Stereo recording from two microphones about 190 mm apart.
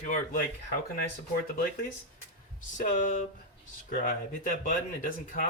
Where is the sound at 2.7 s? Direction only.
45° left (ahead or behind).